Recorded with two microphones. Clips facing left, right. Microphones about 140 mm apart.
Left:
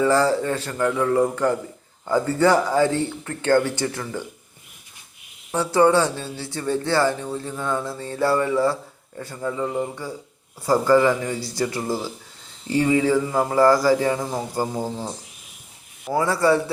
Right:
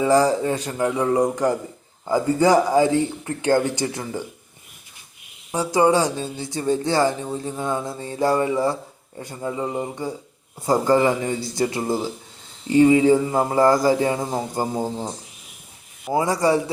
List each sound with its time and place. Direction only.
0.0 s speech: 15° right (ahead or behind)
5.5 s speech: 15° right (ahead or behind)